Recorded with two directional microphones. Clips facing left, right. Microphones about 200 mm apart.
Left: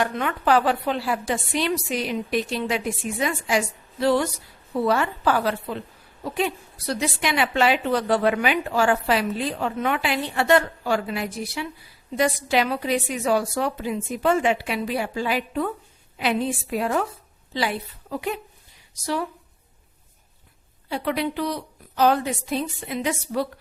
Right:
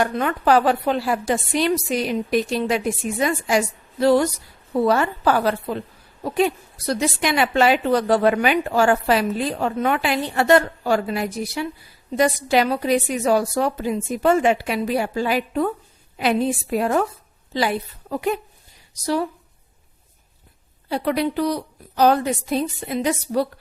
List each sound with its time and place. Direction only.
0.0 s a woman's voice: 40° right (ahead or behind)
20.9 s a woman's voice: 40° right (ahead or behind)